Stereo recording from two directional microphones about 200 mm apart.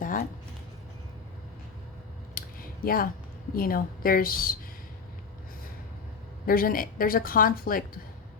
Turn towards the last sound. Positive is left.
turn(degrees=45)  # may be behind; listen again after turning